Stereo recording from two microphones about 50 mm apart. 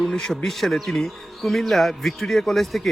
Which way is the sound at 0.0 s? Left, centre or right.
Centre.